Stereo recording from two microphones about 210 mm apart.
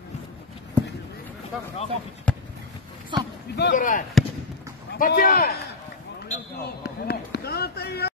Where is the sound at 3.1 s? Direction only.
20° right (ahead or behind).